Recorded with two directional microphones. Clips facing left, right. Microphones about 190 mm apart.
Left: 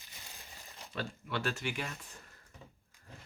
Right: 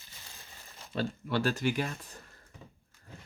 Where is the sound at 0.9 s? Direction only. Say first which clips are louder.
Right 7 dB; 35° right (ahead or behind).